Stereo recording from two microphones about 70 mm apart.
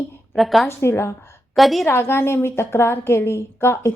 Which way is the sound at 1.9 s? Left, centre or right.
Left.